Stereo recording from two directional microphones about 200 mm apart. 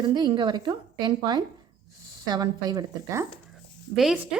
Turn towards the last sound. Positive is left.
turn(degrees=0)  # may be behind; listen again after turning